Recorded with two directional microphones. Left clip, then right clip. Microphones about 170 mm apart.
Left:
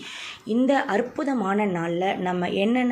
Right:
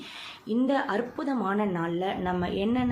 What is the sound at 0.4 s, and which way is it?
A woman's voice, 15° left (ahead or behind).